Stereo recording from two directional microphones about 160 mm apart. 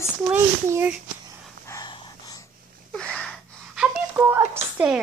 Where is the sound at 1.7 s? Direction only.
25° left (ahead or behind).